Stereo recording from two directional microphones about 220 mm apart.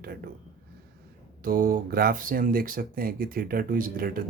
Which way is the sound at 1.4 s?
40° right (ahead or behind).